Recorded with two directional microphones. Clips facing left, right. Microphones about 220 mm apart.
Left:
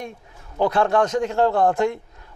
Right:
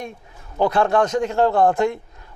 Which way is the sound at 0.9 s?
25° right (ahead or behind).